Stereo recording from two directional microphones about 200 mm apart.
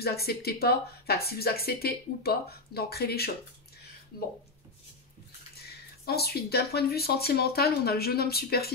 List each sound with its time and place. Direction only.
0.0 s speech: 50° left (ahead or behind)
5.6 s speech: 50° left (ahead or behind)